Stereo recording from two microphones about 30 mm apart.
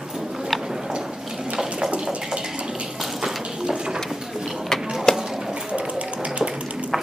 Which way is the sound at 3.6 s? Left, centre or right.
Right.